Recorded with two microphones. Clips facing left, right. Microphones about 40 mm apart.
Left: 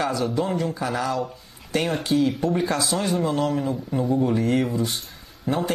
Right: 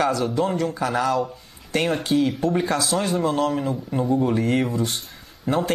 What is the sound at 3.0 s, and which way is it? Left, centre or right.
Speech, right.